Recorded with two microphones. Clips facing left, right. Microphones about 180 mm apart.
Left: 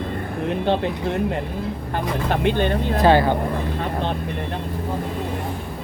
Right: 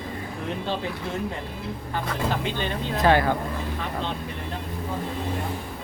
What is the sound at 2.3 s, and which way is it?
Speech, 60° left (ahead or behind).